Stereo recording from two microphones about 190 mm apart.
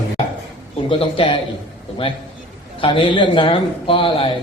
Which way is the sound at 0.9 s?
25° left (ahead or behind).